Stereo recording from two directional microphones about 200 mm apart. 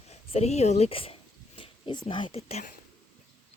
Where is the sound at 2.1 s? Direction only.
25° left (ahead or behind).